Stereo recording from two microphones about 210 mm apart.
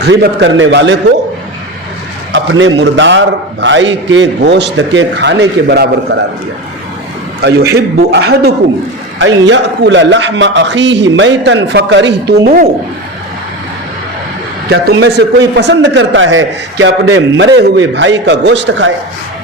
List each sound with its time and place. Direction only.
0.0 s a man's voice: 55° right (ahead or behind)
2.3 s a man's voice: 65° right (ahead or behind)
7.4 s a man's voice: 50° right (ahead or behind)
14.7 s a man's voice: 55° right (ahead or behind)